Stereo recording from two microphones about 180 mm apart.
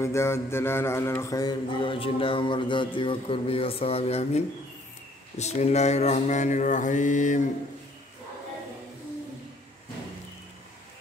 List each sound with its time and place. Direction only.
0.0 s mantra: 15° left (ahead or behind); by 4.4 s 35° left (ahead or behind)
5.4 s mantra: 40° left (ahead or behind)